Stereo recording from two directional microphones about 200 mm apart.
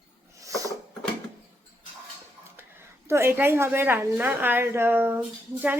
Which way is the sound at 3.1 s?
10° right (ahead or behind).